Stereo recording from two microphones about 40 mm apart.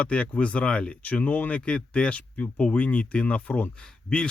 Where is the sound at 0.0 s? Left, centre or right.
Left.